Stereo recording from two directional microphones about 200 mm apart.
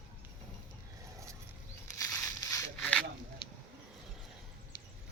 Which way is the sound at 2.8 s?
5° left (ahead or behind).